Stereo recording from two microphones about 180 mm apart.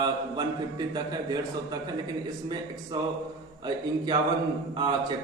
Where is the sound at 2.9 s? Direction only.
25° right (ahead or behind).